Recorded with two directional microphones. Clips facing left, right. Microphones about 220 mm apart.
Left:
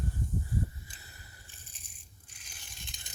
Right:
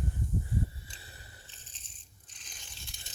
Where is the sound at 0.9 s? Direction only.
30° right (ahead or behind).